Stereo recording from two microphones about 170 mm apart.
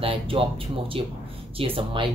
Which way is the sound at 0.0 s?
30° right (ahead or behind).